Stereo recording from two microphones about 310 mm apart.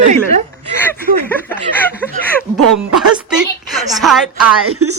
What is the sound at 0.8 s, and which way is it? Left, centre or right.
Speech, centre.